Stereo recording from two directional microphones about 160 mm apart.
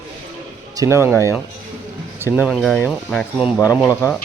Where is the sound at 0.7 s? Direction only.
15° right (ahead or behind).